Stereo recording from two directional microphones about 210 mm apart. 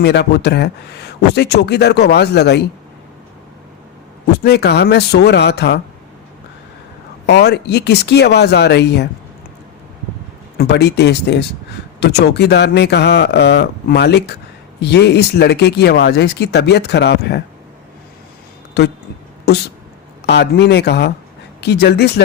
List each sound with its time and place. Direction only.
0.0 s a man's voice: 55° left (ahead or behind)
4.3 s a man's voice: 50° left (ahead or behind)
7.3 s a man's voice: 50° left (ahead or behind)
10.6 s a man's voice: 50° left (ahead or behind)
18.8 s a man's voice: 50° left (ahead or behind)
20.2 s a man's voice: 55° left (ahead or behind)